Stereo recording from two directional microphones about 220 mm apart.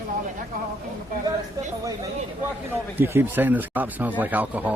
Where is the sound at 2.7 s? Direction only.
10° right (ahead or behind).